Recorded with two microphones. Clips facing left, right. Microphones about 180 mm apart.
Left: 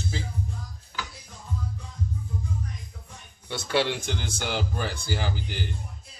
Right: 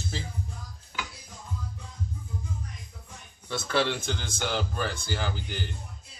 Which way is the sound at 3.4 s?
15° left (ahead or behind).